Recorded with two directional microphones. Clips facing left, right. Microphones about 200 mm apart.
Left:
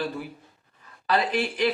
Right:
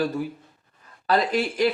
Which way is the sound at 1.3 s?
40° right (ahead or behind).